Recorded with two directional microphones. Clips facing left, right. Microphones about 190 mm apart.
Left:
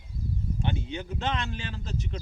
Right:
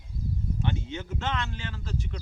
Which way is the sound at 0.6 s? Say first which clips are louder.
Left 1 dB; 15° left (ahead or behind).